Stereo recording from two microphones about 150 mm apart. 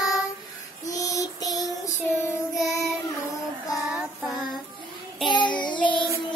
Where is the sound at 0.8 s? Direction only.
20° left (ahead or behind).